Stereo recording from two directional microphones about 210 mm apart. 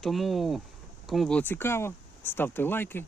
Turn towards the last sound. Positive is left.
turn(degrees=10)  # may be behind; listen again after turning